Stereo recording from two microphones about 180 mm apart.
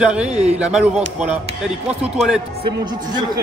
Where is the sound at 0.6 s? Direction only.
5° right (ahead or behind).